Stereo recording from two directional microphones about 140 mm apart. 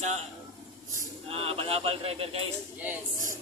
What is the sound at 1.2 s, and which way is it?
Speech, 45° right (ahead or behind).